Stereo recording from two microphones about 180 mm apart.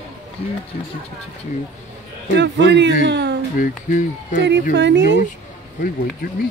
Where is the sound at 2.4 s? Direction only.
75° right (ahead or behind).